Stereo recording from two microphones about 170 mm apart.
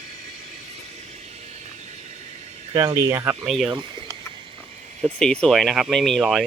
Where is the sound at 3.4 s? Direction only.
Centre (ahead or behind).